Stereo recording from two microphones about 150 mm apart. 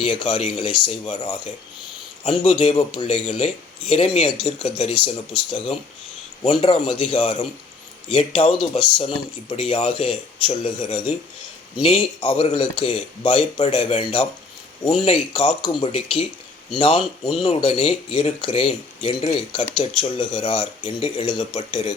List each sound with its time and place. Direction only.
0.0 s speech: 35° left (ahead or behind)